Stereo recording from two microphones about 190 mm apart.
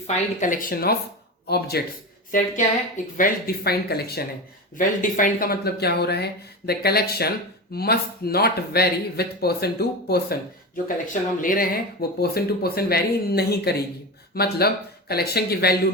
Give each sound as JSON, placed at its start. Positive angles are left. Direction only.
{"t": 0.3, "sound": "speech", "side_deg": 45}
{"t": 2.3, "sound": "speech", "side_deg": 45}
{"t": 4.8, "sound": "speech", "side_deg": 45}
{"t": 10.8, "sound": "speech", "side_deg": 45}